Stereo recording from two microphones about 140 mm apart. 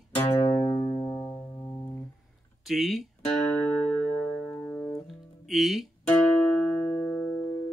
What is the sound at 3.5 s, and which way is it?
Music, 5° left (ahead or behind).